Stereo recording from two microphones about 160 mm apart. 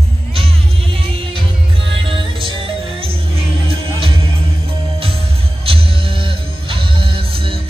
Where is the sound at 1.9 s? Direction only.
35° right (ahead or behind).